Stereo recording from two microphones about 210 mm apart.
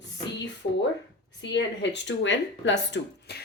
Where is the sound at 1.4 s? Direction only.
55° left (ahead or behind).